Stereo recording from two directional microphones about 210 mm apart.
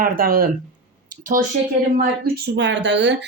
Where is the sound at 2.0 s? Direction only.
50° right (ahead or behind).